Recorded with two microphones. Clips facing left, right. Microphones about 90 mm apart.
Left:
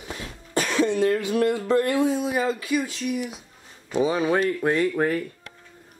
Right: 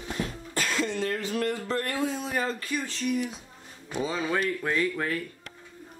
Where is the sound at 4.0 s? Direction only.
15° left (ahead or behind).